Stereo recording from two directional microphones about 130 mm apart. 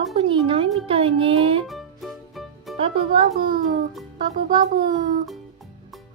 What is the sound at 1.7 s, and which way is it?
Music, centre (ahead or behind).